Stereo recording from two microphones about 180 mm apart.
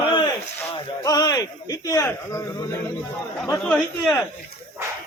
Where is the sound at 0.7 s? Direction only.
20° left (ahead or behind).